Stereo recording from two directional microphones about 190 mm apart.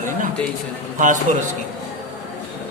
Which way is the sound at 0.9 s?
40° right (ahead or behind).